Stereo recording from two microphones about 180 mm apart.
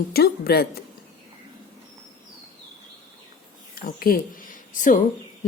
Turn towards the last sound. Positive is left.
turn(degrees=45)  # may be behind; listen again after turning